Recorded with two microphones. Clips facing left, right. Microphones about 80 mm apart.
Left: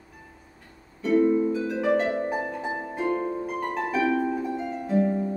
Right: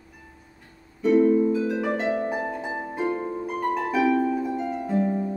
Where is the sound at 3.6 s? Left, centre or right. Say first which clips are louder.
Right 4 dB; centre.